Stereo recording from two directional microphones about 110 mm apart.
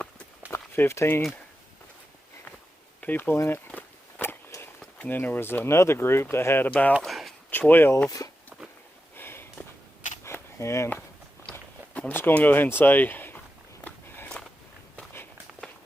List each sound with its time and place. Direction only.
0.5 s speech: 25° left (ahead or behind)
3.0 s speech: 15° left (ahead or behind)
3.7 s biting: 15° left (ahead or behind)
4.9 s speech: 15° left (ahead or behind)
7.0 s a sound: centre (ahead or behind)
7.7 s speech: 20° left (ahead or behind)
9.1 s a sound: 20° left (ahead or behind)
11.5 s speech: 15° left (ahead or behind)
14.9 s walk: 20° left (ahead or behind)